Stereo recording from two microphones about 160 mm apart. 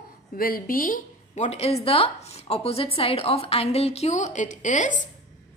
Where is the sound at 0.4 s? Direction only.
65° left (ahead or behind).